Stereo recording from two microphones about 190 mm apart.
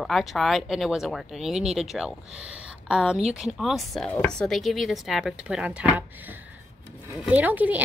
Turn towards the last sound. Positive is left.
turn(degrees=-10)  # may be behind; listen again after turning